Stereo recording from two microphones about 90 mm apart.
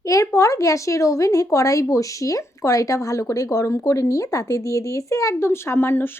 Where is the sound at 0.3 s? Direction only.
40° left (ahead or behind).